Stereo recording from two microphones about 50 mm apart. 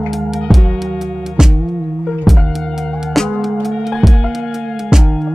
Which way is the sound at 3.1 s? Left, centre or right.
Centre.